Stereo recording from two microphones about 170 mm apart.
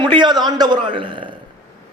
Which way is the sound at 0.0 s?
25° right (ahead or behind).